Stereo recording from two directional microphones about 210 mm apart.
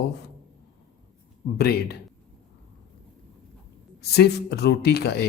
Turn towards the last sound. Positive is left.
turn(degrees=50)  # may be behind; listen again after turning